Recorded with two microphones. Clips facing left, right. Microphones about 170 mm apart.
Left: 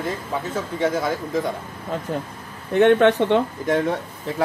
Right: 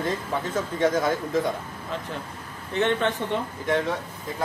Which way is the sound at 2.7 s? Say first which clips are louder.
Left 9 dB; 55° left (ahead or behind).